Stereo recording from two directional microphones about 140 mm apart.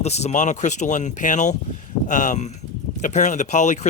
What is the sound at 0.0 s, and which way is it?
A man's voice, 50° left (ahead or behind).